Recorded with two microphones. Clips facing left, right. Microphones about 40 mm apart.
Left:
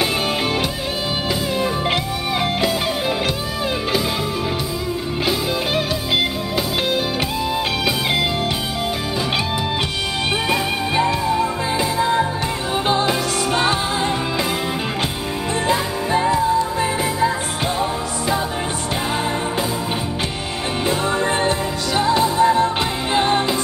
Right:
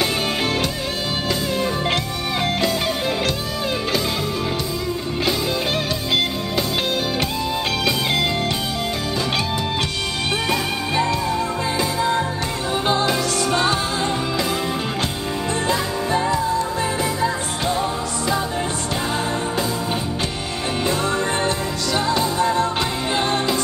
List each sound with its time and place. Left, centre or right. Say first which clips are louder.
10.5 s music: left 2 dB; centre
15.6 s music: left 3 dB; left
20.8 s music: left 2 dB; centre